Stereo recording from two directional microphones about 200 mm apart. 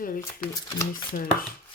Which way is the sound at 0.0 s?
45° left (ahead or behind).